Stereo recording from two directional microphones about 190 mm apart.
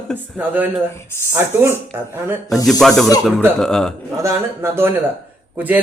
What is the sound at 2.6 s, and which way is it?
A woman's voice, centre (ahead or behind).